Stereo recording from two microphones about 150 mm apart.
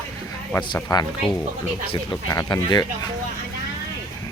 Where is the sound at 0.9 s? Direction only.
25° left (ahead or behind).